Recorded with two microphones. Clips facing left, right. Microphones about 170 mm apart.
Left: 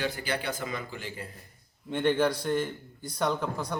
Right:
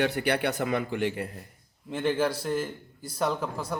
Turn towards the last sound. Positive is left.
turn(degrees=-5)  # may be behind; listen again after turning